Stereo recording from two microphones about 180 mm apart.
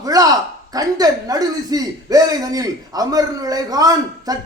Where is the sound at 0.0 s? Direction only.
20° right (ahead or behind).